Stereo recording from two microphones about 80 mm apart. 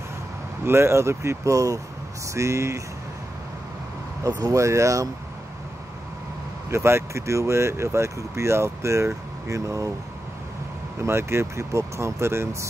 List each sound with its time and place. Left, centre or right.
0.7 s speech: right
4.4 s speech: right
6.7 s speech: right
11.0 s speech: right